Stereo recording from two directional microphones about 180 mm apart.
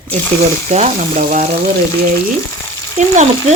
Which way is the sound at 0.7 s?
40° right (ahead or behind).